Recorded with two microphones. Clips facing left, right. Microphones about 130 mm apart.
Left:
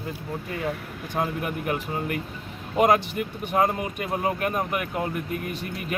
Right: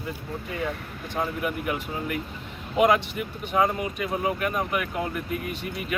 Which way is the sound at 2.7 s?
45° left (ahead or behind).